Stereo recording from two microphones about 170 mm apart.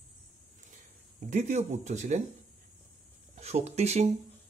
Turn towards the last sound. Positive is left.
turn(degrees=-40)  # may be behind; listen again after turning